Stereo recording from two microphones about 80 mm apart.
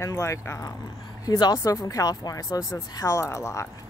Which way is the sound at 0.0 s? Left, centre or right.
Left.